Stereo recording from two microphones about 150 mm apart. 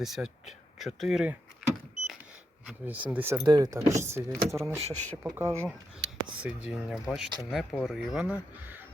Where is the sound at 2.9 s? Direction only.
10° right (ahead or behind).